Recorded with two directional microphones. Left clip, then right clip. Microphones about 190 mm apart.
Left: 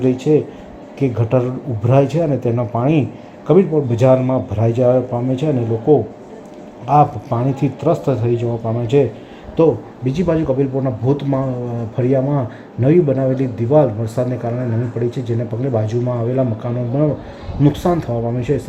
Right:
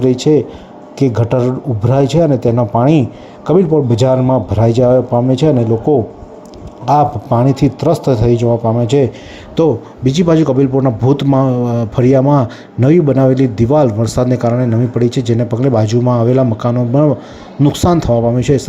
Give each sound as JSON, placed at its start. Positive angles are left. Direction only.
{"t": 0.0, "sound": "a man's voice", "side_deg": -20}